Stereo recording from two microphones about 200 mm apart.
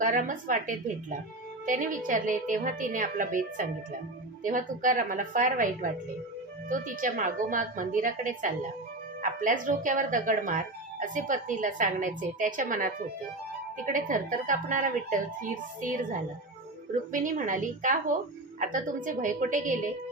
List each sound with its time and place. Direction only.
0.0 s a woman's voice: 40° right (ahead or behind)
4.4 s a woman's voice: 40° right (ahead or behind)